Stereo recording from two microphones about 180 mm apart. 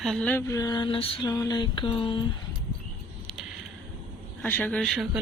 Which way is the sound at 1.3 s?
20° left (ahead or behind).